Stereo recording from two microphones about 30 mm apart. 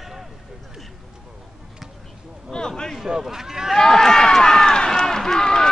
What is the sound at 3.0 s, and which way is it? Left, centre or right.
Speech, centre.